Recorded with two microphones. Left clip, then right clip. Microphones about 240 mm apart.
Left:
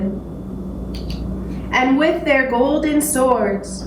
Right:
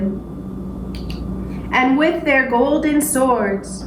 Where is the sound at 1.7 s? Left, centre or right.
Right.